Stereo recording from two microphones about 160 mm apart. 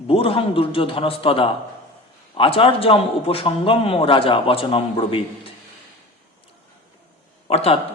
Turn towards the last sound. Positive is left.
turn(degrees=40)  # may be behind; listen again after turning